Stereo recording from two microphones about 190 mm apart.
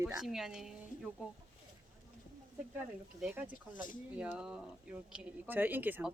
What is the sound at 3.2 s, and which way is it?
Speech, centre (ahead or behind).